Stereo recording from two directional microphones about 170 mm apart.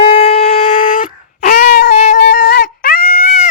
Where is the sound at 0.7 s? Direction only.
55° left (ahead or behind).